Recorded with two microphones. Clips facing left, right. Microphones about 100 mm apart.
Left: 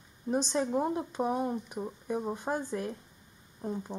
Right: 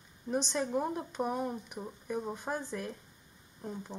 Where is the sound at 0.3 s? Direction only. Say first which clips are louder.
Left 3 dB; 20° left (ahead or behind).